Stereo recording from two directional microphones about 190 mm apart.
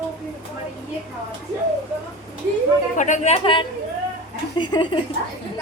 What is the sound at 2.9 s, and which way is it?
A man's voice, 40° left (ahead or behind).